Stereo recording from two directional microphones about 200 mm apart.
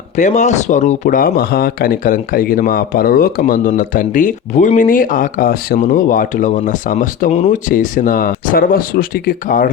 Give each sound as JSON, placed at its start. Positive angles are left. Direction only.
{"t": 0.2, "sound": "speech", "side_deg": 35}